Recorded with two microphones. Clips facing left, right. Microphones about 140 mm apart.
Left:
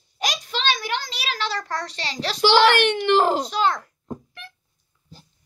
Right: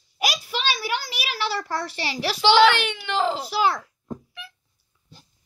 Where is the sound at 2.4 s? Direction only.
50° left (ahead or behind).